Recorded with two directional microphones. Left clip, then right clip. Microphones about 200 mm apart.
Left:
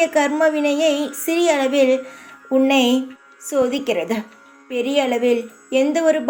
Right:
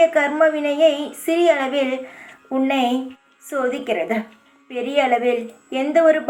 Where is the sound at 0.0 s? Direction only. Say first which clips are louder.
Right 1 dB; 40° left (ahead or behind).